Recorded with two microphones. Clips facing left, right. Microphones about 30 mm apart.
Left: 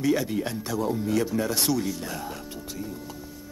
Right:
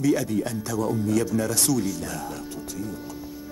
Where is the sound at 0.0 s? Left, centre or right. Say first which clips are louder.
Right 2 dB; left.